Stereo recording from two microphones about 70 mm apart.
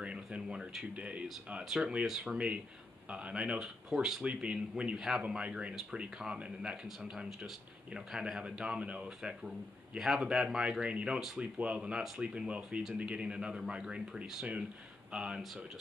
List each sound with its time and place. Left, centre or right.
0.0 s speech: centre
1.6 s speech: centre